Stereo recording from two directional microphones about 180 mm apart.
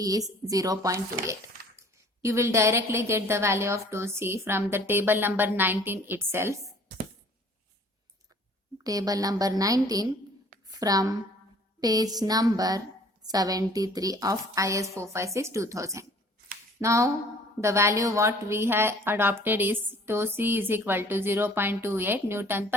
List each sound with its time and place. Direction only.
0.0 s a woman's voice: 20° right (ahead or behind)
2.2 s a woman's voice: 15° right (ahead or behind)
8.8 s a woman's voice: 20° right (ahead or behind)